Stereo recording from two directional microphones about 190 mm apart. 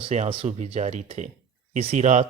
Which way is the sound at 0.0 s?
30° right (ahead or behind).